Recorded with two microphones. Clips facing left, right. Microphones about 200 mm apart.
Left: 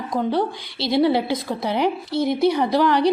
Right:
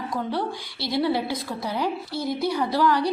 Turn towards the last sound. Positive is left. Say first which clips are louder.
# left 4 dB
turn(degrees=20)  # may be behind; listen again after turning